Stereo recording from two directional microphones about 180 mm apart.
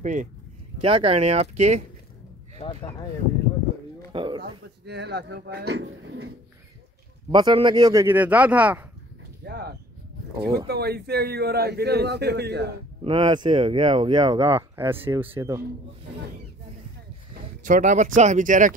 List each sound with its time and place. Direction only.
0.0 s speech: 45° right (ahead or behind)
0.8 s speech: 30° right (ahead or behind)
2.6 s speech: 35° left (ahead or behind)
4.1 s speech: 30° right (ahead or behind)
4.4 s speech: 65° right (ahead or behind)
7.2 s speech: 25° right (ahead or behind); by 8.8 s 10° right (ahead or behind)
9.5 s a sound: 65° right (ahead or behind)
10.7 s a man's voice: 60° right (ahead or behind)
13.0 s speech: 30° right (ahead or behind)
17.6 s speech: 45° right (ahead or behind)